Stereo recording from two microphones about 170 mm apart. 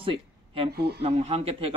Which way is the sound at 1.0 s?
35° right (ahead or behind).